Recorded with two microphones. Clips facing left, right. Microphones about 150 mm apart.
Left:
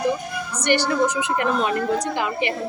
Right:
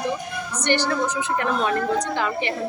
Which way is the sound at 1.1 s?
15° left (ahead or behind).